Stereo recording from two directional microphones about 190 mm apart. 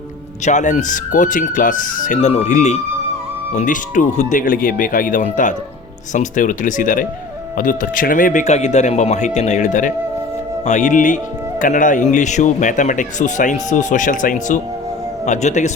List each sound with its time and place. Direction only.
0.4 s speech: 40° left (ahead or behind)